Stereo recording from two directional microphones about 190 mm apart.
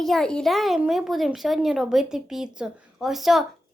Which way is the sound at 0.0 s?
Centre (ahead or behind).